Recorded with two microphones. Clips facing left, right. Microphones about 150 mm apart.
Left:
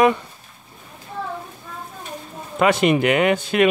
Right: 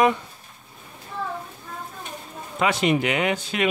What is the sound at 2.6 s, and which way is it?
Speech, 60° left (ahead or behind).